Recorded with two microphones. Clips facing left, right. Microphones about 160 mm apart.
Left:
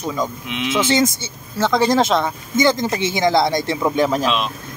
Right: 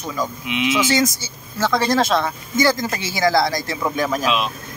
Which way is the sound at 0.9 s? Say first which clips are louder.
Left 2 dB; 25° left (ahead or behind).